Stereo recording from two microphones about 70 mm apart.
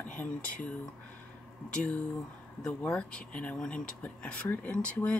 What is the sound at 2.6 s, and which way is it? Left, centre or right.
Speech, centre.